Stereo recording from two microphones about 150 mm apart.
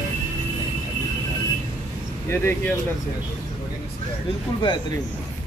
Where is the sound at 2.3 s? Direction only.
15° left (ahead or behind).